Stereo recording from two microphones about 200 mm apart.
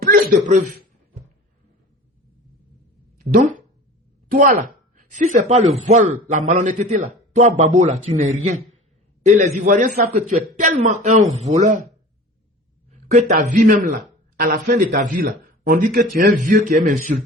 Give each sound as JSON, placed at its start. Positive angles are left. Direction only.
{"t": 0.0, "sound": "a sound", "side_deg": -45}
{"t": 3.3, "sound": "a man's voice", "side_deg": -40}
{"t": 12.9, "sound": "a man's voice", "side_deg": -40}